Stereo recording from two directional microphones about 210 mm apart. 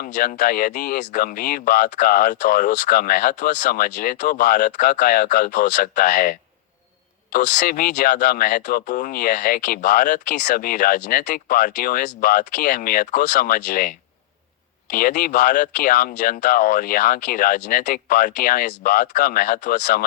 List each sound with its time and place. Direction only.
0.0 s speech: 40° left (ahead or behind)
7.3 s speech: 40° left (ahead or behind)